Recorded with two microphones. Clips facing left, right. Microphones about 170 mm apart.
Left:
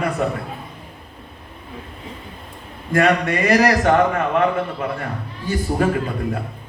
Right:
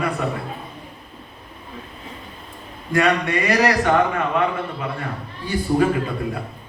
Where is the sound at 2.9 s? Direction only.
45° left (ahead or behind).